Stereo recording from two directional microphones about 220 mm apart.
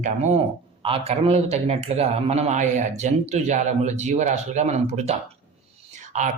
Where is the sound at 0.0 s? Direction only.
30° right (ahead or behind).